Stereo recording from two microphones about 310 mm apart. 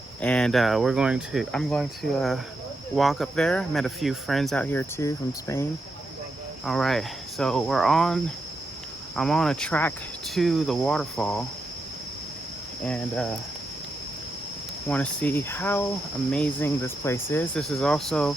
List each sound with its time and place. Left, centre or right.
0.2 s speech: centre
6.7 s speech: centre
12.8 s speech: centre
14.8 s cricket: centre
16.3 s speech: centre